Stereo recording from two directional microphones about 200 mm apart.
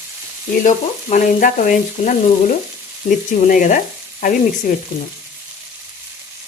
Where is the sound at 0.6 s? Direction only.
40° left (ahead or behind).